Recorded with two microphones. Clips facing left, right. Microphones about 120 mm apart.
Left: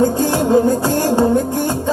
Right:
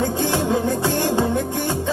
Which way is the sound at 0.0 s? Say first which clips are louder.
Left 6 dB; 40° left (ahead or behind).